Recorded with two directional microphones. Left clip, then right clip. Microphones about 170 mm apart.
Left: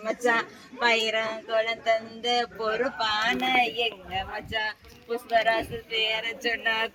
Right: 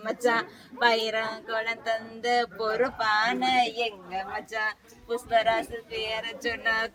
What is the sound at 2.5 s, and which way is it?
Speech, 25° left (ahead or behind).